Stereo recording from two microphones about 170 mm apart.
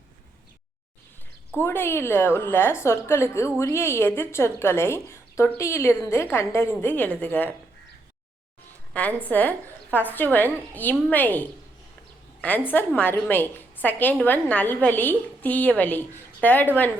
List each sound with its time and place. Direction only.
1.5 s a woman's voice: 15° left (ahead or behind)
8.9 s a woman's voice: 10° left (ahead or behind)